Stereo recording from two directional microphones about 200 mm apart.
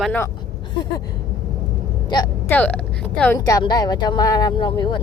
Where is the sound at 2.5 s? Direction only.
5° left (ahead or behind).